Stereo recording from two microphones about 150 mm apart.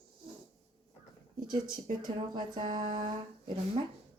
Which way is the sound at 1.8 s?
30° right (ahead or behind).